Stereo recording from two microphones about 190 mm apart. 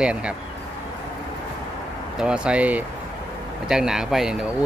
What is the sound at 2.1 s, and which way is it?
A man's voice, 5° right (ahead or behind).